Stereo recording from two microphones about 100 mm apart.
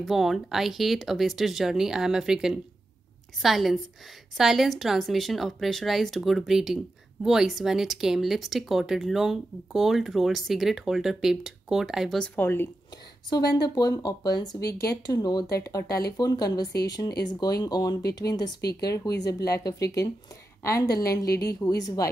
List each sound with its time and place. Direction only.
0.0 s speech: centre (ahead or behind)
12.4 s speech: 20° left (ahead or behind)
13.3 s speech: 40° left (ahead or behind)